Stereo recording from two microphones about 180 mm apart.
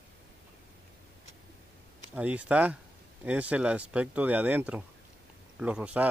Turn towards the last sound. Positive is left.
turn(degrees=-5)  # may be behind; listen again after turning